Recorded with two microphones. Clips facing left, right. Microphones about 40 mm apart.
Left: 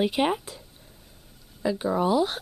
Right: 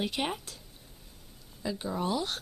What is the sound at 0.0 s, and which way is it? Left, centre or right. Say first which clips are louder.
Speech: left 9 dB; centre.